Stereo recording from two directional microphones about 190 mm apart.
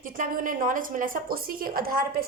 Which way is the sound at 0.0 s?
45° right (ahead or behind).